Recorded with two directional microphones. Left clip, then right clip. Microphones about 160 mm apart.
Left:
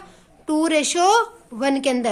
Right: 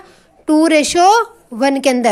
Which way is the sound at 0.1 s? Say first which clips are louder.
Right 9 dB; 30° right (ahead or behind).